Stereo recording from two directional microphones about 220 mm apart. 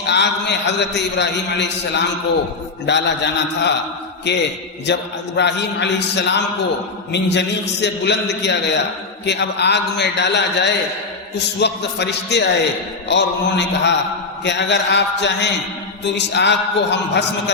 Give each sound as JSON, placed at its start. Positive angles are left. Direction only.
{"t": 0.1, "sound": "a man's voice", "side_deg": 50}